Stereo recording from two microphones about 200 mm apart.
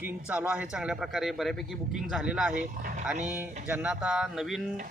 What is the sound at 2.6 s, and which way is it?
Speech, 40° right (ahead or behind).